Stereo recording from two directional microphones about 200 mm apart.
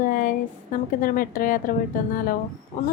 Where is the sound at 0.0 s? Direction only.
40° left (ahead or behind).